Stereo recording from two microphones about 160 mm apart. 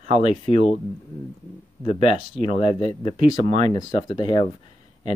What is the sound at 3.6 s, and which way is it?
Speech, 25° left (ahead or behind).